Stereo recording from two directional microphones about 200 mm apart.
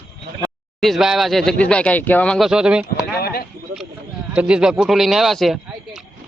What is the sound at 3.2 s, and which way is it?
Speech, 50° left (ahead or behind).